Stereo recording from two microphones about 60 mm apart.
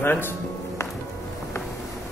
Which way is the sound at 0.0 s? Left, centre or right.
Left.